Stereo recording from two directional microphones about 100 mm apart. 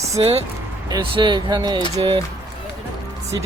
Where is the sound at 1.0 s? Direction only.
55° right (ahead or behind).